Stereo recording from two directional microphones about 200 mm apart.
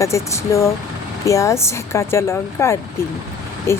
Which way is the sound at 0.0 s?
15° left (ahead or behind).